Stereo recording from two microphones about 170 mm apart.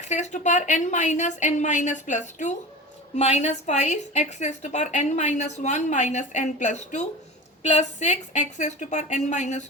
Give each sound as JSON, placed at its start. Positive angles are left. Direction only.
{"t": 0.0, "sound": "a woman's voice", "side_deg": 45}